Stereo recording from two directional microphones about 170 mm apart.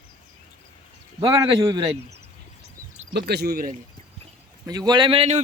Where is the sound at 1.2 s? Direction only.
25° right (ahead or behind).